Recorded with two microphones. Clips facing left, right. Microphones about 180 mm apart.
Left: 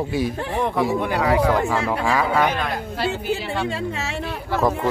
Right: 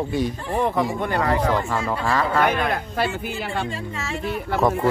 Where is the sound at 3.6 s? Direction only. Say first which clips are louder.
Left 4 dB; 70° left (ahead or behind).